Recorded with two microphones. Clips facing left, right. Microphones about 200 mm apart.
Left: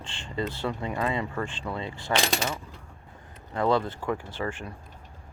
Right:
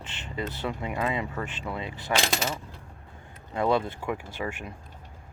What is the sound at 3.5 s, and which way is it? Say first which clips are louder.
Speech: even; 20° right (ahead or behind).